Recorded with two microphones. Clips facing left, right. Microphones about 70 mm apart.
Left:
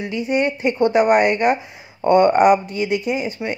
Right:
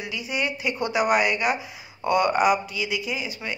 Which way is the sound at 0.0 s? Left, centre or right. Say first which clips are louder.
Left 8 dB; left.